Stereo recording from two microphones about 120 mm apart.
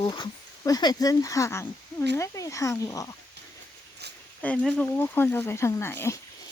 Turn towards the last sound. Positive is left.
turn(degrees=20)  # may be behind; listen again after turning